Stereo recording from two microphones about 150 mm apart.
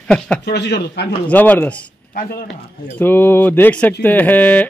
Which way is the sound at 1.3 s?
10° left (ahead or behind).